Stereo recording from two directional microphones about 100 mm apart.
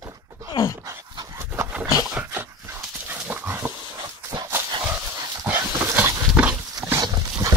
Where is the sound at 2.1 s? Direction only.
20° right (ahead or behind).